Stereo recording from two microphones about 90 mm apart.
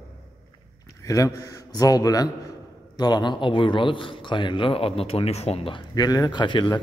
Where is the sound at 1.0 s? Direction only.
40° left (ahead or behind); by 5.8 s 90° left.